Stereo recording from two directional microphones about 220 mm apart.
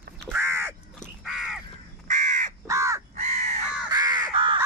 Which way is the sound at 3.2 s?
30° right (ahead or behind).